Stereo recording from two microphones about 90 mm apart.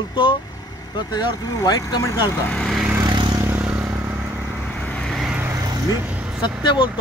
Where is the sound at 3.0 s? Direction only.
55° right (ahead or behind).